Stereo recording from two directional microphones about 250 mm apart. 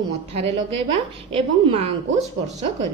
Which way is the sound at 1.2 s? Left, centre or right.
Right.